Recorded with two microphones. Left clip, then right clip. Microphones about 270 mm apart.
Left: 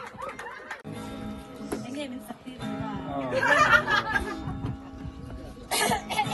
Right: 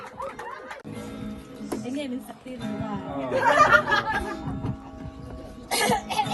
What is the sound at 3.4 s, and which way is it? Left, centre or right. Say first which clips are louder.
Music: right 3 dB; right.